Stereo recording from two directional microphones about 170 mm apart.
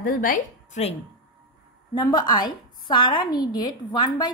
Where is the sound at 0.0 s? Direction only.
55° left (ahead or behind).